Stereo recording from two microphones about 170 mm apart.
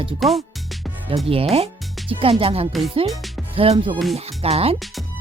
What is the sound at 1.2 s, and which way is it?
Speech, 35° right (ahead or behind).